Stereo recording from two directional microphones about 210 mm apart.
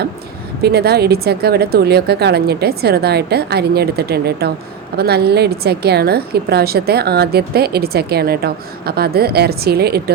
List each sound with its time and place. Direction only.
0.6 s a woman's voice: 50° right (ahead or behind)